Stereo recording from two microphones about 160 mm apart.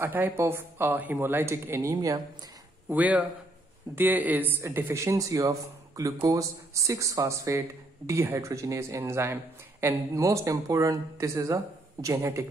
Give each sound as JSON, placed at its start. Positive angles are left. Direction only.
{"t": 0.0, "sound": "speech", "side_deg": -15}
{"t": 2.9, "sound": "speech", "side_deg": -10}